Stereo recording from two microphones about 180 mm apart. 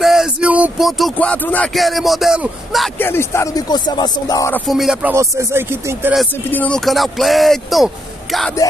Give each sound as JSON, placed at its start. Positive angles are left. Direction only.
{"t": 0.0, "sound": "speech", "side_deg": 0}
{"t": 3.0, "sound": "speech", "side_deg": 15}
{"t": 4.6, "sound": "speech", "side_deg": 0}
{"t": 5.1, "sound": "speech", "side_deg": -15}
{"t": 6.5, "sound": "speech", "side_deg": 5}